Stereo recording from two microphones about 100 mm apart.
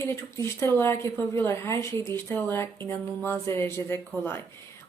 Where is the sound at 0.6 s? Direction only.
25° left (ahead or behind).